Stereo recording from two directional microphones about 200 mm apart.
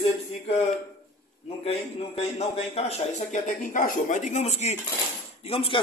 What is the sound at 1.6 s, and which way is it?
A man's voice, 30° left (ahead or behind).